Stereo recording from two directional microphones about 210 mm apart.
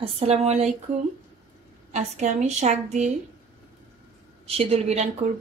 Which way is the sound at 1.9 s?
35° right (ahead or behind).